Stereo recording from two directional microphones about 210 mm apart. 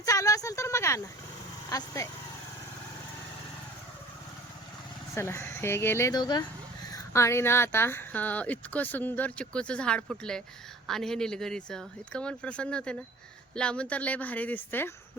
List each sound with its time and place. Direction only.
0.0 s a sound: 15° left (ahead or behind)
2.0 s speech: 15° left (ahead or behind)
5.1 s speech: 10° left (ahead or behind)